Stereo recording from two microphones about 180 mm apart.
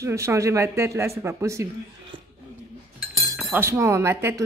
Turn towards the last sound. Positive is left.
turn(degrees=-15)  # may be behind; listen again after turning